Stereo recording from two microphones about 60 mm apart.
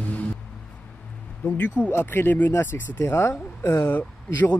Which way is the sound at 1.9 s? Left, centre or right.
Left.